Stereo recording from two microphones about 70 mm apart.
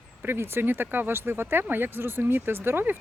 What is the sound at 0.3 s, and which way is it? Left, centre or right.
Speech, right.